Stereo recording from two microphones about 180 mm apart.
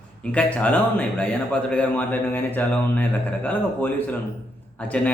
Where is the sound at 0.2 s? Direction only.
5° left (ahead or behind).